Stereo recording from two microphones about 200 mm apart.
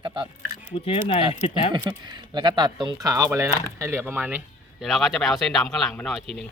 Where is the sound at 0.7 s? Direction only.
30° left (ahead or behind).